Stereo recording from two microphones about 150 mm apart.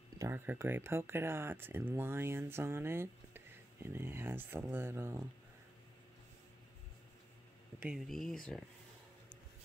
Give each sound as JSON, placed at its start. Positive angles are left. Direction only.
{"t": 0.2, "sound": "speech", "side_deg": -15}
{"t": 7.8, "sound": "speech", "side_deg": 0}